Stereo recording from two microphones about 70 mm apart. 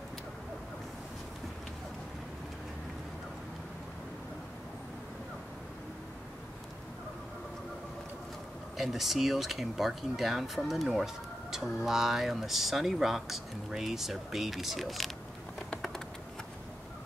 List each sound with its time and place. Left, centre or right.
8.7 s speech: centre
15.7 s typing: centre